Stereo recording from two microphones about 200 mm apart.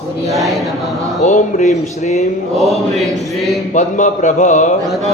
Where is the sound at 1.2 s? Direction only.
35° left (ahead or behind).